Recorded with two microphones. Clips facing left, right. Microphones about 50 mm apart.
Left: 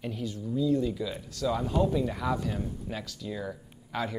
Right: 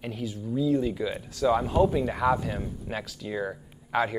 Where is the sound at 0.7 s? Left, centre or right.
Right.